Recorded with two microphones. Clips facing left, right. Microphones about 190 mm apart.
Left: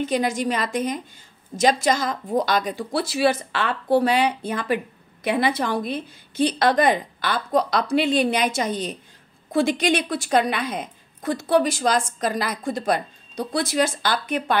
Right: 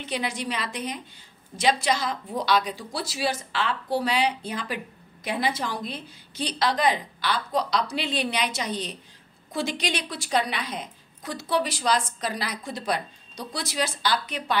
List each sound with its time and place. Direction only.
0.0 s speech: 45° left (ahead or behind)